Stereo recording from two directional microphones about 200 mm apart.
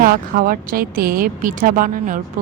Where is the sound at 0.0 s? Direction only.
45° right (ahead or behind).